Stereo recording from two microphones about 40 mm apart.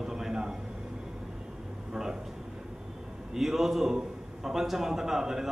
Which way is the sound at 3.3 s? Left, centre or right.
Centre.